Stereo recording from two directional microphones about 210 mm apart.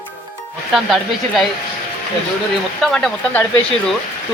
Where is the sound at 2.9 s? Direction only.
Centre (ahead or behind).